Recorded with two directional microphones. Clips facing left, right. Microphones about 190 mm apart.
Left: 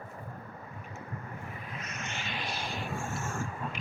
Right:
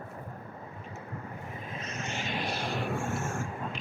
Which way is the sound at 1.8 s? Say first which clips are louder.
Right 5 dB; 30° right (ahead or behind).